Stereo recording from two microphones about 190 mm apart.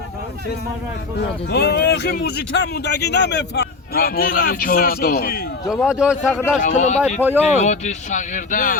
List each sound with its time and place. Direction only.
1.5 s speech: 60° left (ahead or behind)
5.6 s speech: centre (ahead or behind)
6.3 s a man's voice: 5° left (ahead or behind)
6.6 s speech: 40° left (ahead or behind)
7.2 s speech: 10° right (ahead or behind)
7.4 s speech: 35° left (ahead or behind)